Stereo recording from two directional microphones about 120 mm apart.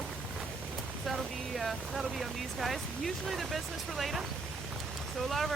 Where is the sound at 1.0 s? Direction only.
Centre (ahead or behind).